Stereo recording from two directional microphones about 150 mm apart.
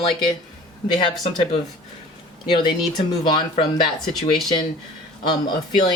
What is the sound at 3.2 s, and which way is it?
Speech, 30° left (ahead or behind).